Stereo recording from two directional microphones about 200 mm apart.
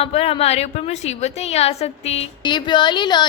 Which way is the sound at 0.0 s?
30° left (ahead or behind).